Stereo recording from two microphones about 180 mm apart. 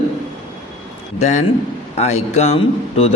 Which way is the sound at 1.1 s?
40° left (ahead or behind).